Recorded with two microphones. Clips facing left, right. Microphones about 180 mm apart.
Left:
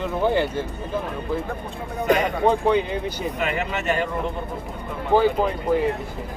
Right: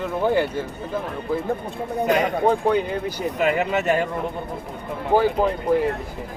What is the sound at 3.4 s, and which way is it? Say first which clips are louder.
Speech: right 6 dB; 40° right (ahead or behind).